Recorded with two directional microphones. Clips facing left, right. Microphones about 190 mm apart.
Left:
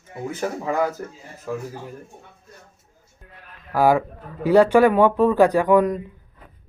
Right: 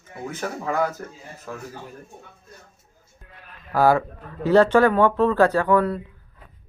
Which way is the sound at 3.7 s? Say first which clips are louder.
Left 1 dB; 15° left (ahead or behind).